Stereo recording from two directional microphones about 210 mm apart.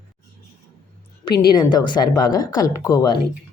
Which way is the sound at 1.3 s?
20° left (ahead or behind).